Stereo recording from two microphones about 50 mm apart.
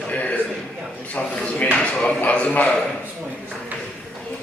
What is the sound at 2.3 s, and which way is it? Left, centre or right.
Speech, left.